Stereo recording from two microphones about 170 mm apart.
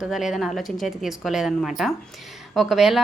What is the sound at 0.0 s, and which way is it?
A woman's voice, centre (ahead or behind).